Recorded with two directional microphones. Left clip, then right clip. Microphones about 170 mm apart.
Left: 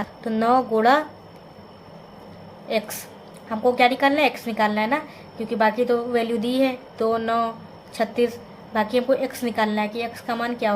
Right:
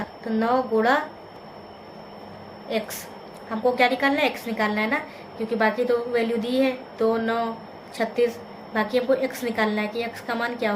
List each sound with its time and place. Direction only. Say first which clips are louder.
0.3 s speech: left 3 dB; 45° left (ahead or behind)
2.6 s a woman's voice: left 3 dB; 40° left (ahead or behind)